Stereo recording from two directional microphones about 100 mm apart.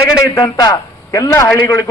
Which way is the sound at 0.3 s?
35° left (ahead or behind).